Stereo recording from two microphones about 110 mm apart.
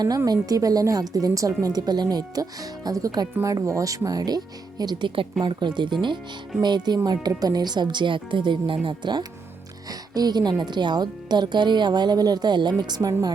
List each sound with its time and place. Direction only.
0.3 s speech: 35° right (ahead or behind)